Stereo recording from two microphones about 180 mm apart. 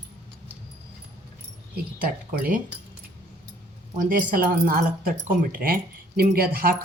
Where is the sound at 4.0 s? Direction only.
50° right (ahead or behind).